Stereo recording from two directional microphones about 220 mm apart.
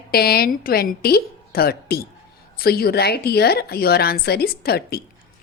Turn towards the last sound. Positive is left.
turn(degrees=45)  # may be behind; listen again after turning